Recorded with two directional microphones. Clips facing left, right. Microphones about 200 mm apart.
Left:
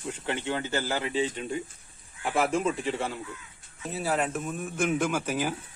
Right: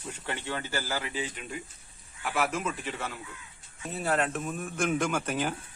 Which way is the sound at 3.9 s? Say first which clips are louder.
Even; 5° left (ahead or behind).